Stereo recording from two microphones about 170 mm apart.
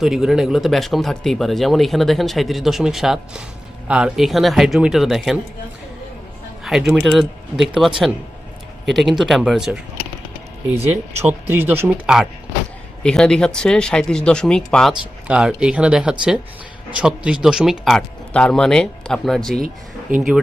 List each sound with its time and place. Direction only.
0.0 s speech: centre (ahead or behind)
6.7 s speech: 5° right (ahead or behind)
11.2 s speech: 15° right (ahead or behind); by 19.6 s 5° left (ahead or behind)
20.1 s speech: 55° right (ahead or behind)